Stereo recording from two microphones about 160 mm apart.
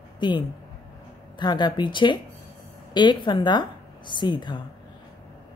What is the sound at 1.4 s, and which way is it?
Speech, 30° left (ahead or behind).